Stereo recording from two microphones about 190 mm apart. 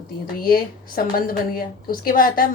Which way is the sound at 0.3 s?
50° left (ahead or behind).